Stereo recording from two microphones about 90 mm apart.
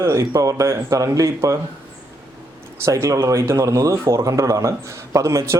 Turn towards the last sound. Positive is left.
turn(degrees=-35)  # may be behind; listen again after turning